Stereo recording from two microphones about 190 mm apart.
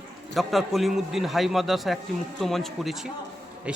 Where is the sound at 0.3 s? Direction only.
Centre (ahead or behind).